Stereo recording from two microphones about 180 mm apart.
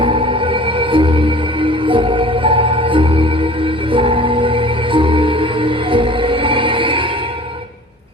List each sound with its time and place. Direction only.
0.0 s music: 30° right (ahead or behind)